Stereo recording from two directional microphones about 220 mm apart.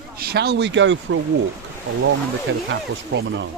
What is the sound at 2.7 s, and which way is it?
Speech, 55° right (ahead or behind).